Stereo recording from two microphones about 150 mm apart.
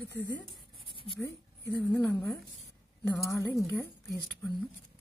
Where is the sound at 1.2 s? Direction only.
20° left (ahead or behind).